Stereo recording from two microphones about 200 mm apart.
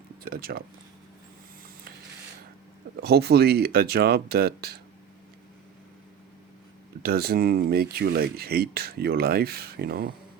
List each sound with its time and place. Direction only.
0.2 s speech: 45° right (ahead or behind)
2.9 s speech: 55° right (ahead or behind)
7.0 s speech: 50° right (ahead or behind)